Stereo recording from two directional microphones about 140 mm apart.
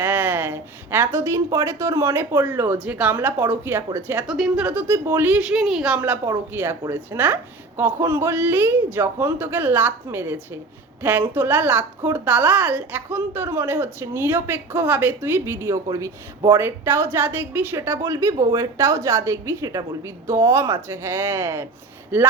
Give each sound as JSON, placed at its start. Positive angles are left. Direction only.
{"t": 0.0, "sound": "a woman's voice", "side_deg": -15}